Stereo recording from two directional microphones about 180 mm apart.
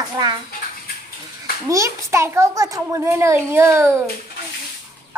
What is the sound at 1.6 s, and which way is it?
A child's voice, 15° right (ahead or behind).